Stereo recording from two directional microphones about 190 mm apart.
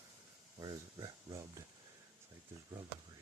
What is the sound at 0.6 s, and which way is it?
Speech, 20° right (ahead or behind).